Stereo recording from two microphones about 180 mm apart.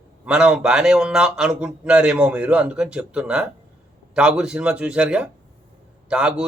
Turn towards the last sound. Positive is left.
turn(degrees=-5)  # may be behind; listen again after turning